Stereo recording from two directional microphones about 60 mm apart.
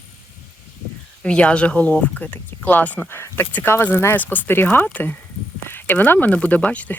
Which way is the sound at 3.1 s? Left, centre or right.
Left.